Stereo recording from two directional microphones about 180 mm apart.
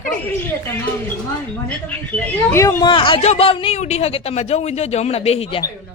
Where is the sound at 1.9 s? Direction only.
10° left (ahead or behind); by 5.6 s 30° left (ahead or behind).